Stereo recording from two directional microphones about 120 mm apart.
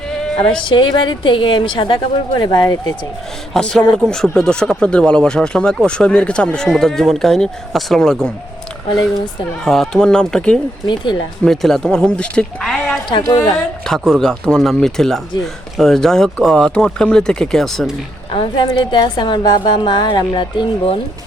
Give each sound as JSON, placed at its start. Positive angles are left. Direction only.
{"t": 0.6, "sound": "a woman's voice", "side_deg": 45}
{"t": 3.5, "sound": "speech", "side_deg": 5}
{"t": 9.6, "sound": "speech", "side_deg": 5}
{"t": 10.8, "sound": "a woman's voice", "side_deg": 40}
{"t": 11.4, "sound": "speech", "side_deg": 5}
{"t": 18.3, "sound": "a woman's voice", "side_deg": 45}